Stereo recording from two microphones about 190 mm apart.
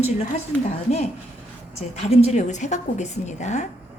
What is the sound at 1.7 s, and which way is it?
Speech, 35° left (ahead or behind).